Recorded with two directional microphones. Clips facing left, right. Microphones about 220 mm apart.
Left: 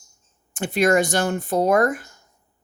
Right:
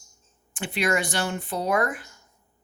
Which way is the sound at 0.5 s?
45° left (ahead or behind).